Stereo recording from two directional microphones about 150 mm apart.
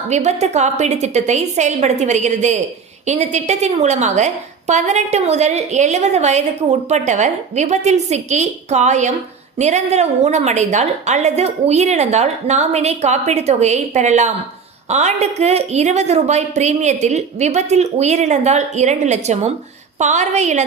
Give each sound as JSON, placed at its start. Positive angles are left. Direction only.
{"t": 0.1, "sound": "a woman's voice", "side_deg": -50}